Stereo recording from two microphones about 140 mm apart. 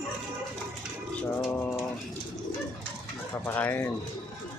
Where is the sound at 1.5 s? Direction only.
15° left (ahead or behind).